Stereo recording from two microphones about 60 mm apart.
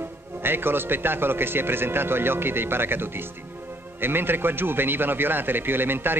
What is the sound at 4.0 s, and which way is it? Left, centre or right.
Speech, right.